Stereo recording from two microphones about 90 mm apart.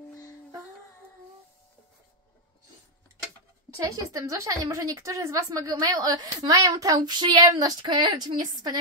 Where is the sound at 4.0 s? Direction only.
40° right (ahead or behind).